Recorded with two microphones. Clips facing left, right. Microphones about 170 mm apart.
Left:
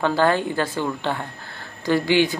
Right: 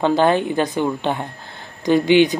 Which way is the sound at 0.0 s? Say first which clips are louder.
Right 3 dB; 20° right (ahead or behind).